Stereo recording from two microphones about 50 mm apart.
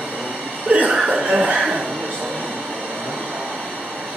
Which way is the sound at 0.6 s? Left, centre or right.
Right.